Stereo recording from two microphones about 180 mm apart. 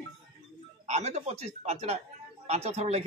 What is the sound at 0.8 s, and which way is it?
Speech, 40° right (ahead or behind).